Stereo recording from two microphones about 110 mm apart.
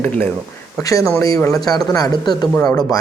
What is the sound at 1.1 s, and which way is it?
Speech, 30° left (ahead or behind).